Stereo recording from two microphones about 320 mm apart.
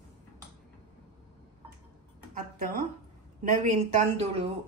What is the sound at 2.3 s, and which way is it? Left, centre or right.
A woman's voice, right.